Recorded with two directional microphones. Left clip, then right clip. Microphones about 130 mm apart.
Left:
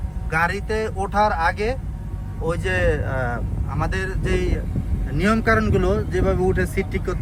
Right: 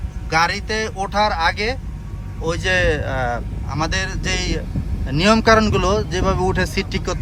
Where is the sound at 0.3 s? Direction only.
5° right (ahead or behind).